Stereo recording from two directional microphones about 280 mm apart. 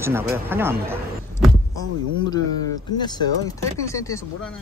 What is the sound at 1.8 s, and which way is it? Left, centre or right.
Speech, centre.